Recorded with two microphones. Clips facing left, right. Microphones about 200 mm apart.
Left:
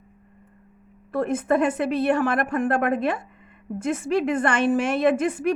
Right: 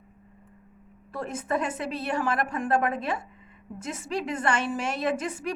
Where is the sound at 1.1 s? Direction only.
55° left (ahead or behind).